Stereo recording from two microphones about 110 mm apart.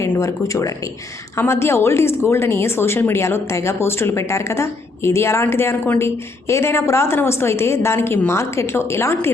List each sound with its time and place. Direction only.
0.0 s speech: 30° left (ahead or behind)